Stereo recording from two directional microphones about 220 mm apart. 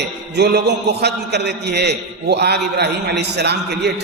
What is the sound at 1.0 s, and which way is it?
A man's voice, 50° right (ahead or behind).